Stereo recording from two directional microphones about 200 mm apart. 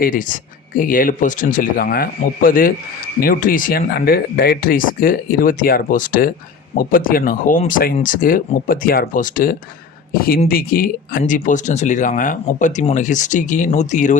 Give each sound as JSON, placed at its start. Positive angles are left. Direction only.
{"t": 0.0, "sound": "speech", "side_deg": 40}